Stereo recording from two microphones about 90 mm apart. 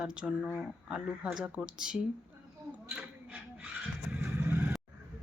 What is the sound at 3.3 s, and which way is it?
Vehicle, 15° right (ahead or behind).